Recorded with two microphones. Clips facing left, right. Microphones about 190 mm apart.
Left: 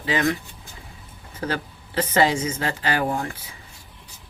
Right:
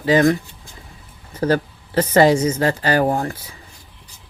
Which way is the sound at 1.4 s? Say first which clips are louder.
Right 9 dB; 40° right (ahead or behind).